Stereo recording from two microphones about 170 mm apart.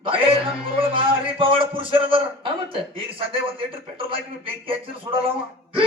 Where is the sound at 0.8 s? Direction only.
30° right (ahead or behind).